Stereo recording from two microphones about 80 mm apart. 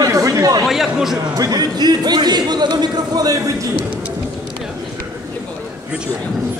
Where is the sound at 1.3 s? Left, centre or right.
Right.